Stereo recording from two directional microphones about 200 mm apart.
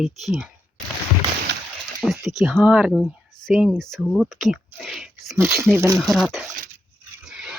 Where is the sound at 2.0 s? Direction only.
Centre (ahead or behind).